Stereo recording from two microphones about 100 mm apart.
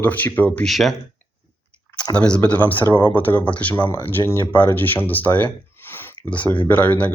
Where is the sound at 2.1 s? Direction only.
10° left (ahead or behind).